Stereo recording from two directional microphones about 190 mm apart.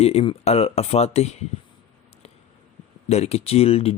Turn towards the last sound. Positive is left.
turn(degrees=30)  # may be behind; listen again after turning